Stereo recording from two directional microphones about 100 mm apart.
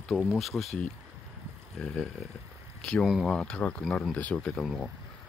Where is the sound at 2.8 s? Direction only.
10° left (ahead or behind).